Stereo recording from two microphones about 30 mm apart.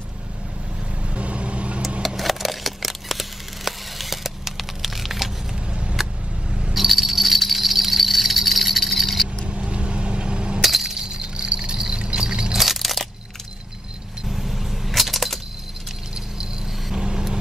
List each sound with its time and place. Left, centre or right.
1.1 s vehicle: right
2.0 s a sound: centre
5.7 s vehicle: right
6.7 s insect: centre
9.5 s vehicle: right
10.6 s music: centre
11.0 s a sound: right
12.2 s keys jangling: right
12.5 s crushing: centre
14.2 s keys jangling: centre
16.3 s vehicle: right